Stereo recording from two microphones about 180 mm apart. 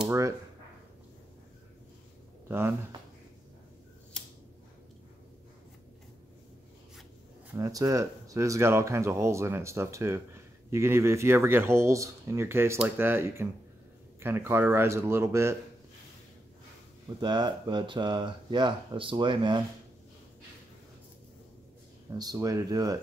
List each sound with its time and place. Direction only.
2.4 s speech: 15° right (ahead or behind)
7.5 s speech: 20° right (ahead or behind)
17.2 s speech: 25° right (ahead or behind)
22.2 s speech: 20° right (ahead or behind)